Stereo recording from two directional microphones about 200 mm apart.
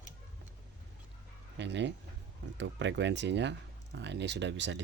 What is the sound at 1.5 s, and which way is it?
Speech, 60° right (ahead or behind).